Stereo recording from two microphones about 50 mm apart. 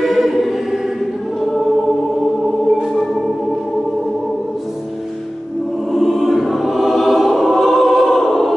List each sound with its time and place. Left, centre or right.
0.0 s choir: centre
5.9 s choir: centre